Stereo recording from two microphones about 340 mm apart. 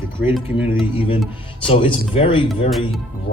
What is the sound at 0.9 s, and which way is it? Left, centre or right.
Speech, centre.